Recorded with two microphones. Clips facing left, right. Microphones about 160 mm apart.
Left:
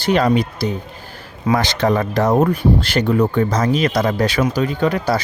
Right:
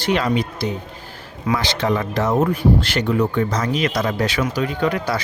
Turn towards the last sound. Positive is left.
turn(degrees=35)  # may be behind; listen again after turning